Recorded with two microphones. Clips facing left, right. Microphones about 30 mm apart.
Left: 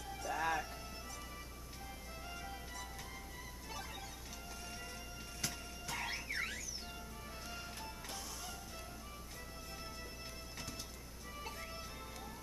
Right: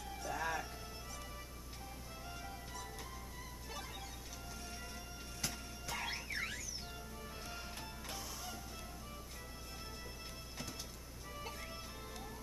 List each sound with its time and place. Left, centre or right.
0.1 s music: centre
2.2 s music: centre
5.4 s music: centre
11.3 s music: centre